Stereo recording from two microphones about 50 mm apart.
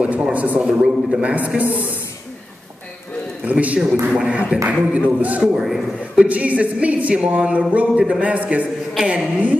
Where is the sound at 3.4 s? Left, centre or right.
Right.